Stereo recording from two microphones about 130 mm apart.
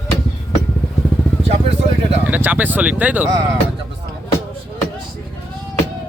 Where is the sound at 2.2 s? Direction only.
10° right (ahead or behind).